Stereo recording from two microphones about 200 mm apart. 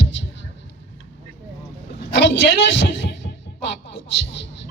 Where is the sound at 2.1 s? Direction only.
60° left (ahead or behind).